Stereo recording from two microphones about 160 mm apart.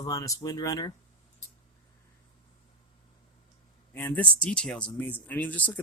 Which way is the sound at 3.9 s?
10° left (ahead or behind).